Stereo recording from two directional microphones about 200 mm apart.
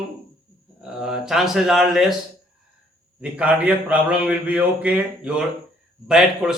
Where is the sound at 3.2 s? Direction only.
5° right (ahead or behind).